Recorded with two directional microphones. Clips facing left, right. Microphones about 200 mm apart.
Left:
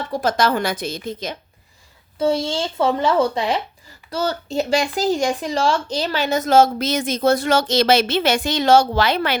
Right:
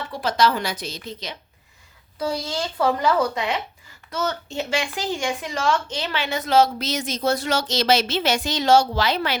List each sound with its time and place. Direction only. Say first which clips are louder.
0.1 s speech: left 2 dB; 45° left (ahead or behind)
2.1 s speech: left 6 dB; 25° left (ahead or behind); by 9.4 s 55° left (ahead or behind)